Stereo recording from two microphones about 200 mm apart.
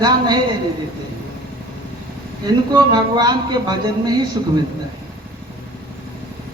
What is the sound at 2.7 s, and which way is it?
Speech, 20° right (ahead or behind).